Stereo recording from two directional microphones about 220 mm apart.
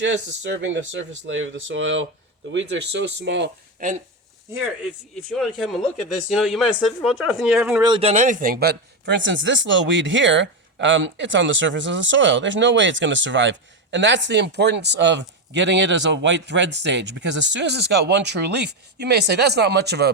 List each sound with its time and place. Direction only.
0.4 s a man's voice: 55° right (ahead or behind)
3.8 s speech: 35° right (ahead or behind)
5.3 s speech: centre (ahead or behind)
7.9 s a man's voice: 25° right (ahead or behind); by 20.1 s 50° right (ahead or behind)